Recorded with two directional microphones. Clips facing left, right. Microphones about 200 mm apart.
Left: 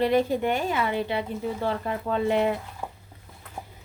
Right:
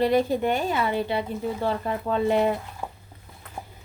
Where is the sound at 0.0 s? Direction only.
35° right (ahead or behind).